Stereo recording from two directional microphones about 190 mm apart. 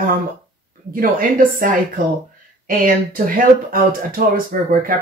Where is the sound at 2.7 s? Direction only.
45° right (ahead or behind).